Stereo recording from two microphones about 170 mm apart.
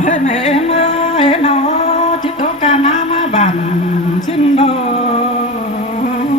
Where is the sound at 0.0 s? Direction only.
45° left (ahead or behind).